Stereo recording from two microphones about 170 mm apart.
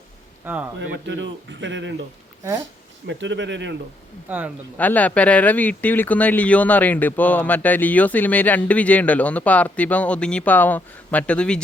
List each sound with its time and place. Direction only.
0.4 s speech: 10° right (ahead or behind)
0.8 s speech: 90° right
3.1 s speech: 90° right
4.3 s speech: 10° right (ahead or behind)
4.8 s speech: 10° left (ahead or behind)